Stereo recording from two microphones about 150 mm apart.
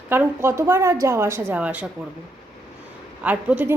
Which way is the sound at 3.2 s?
10° right (ahead or behind).